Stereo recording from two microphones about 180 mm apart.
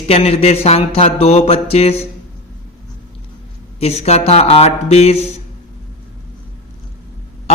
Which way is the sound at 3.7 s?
35° left (ahead or behind).